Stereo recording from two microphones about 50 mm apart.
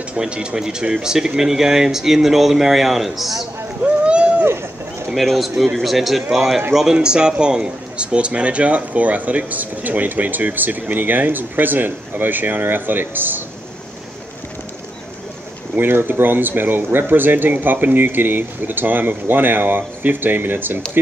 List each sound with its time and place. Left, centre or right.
0.1 s speech: centre
3.8 s a sound: right
5.1 s a man's voice: centre; by 13.4 s right
15.7 s speech: right